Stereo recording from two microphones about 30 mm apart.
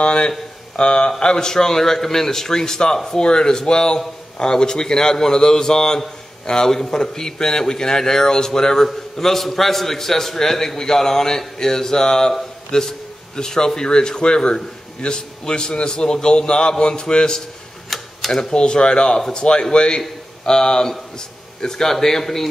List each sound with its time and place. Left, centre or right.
0.0 s speech: left
1.2 s a man's voice: left
17.8 s tick-tock: centre
18.3 s a man's voice: left; by 22.5 s centre